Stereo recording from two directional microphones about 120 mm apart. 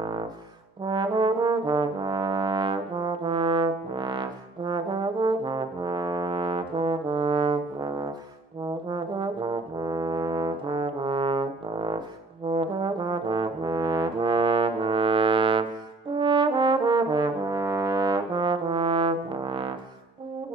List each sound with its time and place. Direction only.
0.8 s trombone: 40° right (ahead or behind)
16.2 s brass instrument: 45° right (ahead or behind)